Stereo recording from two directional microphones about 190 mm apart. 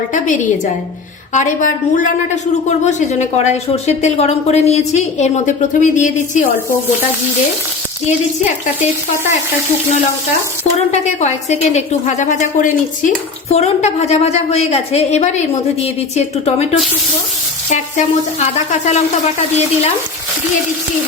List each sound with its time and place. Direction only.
0.1 s a woman's voice: 40° left (ahead or behind)
11.0 s a woman's voice: 35° left (ahead or behind)